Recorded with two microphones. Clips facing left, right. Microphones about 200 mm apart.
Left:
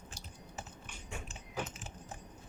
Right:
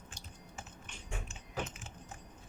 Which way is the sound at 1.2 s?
35° left (ahead or behind).